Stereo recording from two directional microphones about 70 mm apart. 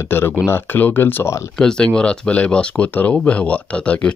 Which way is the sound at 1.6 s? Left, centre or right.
Centre.